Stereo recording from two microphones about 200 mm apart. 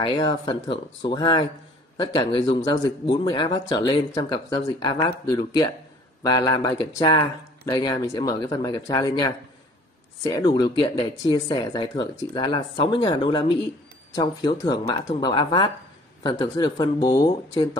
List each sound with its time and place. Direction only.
0.0 s speech: 20° left (ahead or behind)